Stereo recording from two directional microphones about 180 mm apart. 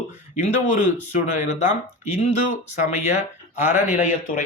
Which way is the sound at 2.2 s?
40° left (ahead or behind).